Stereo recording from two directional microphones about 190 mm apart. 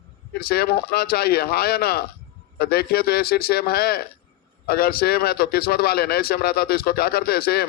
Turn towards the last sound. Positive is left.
turn(degrees=55)  # may be behind; listen again after turning